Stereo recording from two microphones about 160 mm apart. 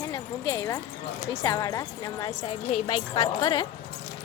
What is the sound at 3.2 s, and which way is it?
Speech, 25° left (ahead or behind).